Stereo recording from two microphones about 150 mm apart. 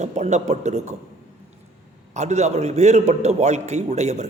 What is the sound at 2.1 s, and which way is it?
A man's voice, 50° right (ahead or behind).